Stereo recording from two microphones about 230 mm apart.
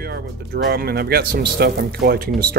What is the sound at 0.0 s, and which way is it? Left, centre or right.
Speech, right.